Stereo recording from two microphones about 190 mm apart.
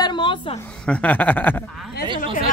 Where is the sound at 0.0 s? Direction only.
25° left (ahead or behind).